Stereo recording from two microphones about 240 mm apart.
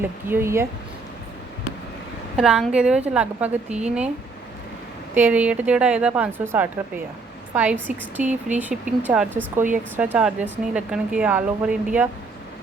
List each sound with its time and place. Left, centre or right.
0.3 s speech: centre
2.3 s speech: centre
5.1 s speech: centre
8.2 s speech: right
8.5 s speech: centre